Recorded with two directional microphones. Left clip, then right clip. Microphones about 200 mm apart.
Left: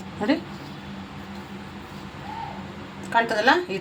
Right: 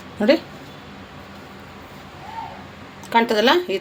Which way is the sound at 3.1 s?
45° right (ahead or behind).